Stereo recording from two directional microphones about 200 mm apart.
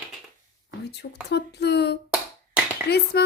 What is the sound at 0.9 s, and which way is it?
Speech, 55° left (ahead or behind).